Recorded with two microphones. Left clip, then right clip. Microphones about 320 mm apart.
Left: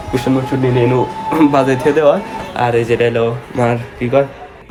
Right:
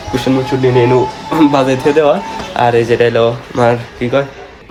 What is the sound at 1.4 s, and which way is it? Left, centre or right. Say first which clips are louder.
Speech: right 2 dB; centre.